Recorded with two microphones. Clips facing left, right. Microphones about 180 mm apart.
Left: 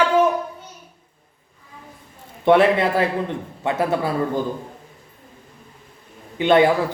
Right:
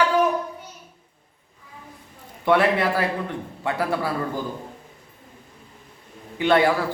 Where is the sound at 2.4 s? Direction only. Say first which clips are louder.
Left 4 dB; 25° left (ahead or behind).